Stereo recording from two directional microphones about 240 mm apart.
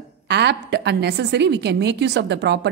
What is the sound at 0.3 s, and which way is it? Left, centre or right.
A woman's voice, right.